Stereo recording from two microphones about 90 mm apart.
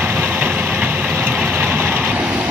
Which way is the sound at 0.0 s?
25° right (ahead or behind).